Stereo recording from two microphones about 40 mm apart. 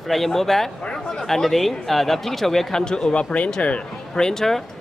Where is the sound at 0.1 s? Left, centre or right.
Centre; by 3.4 s left.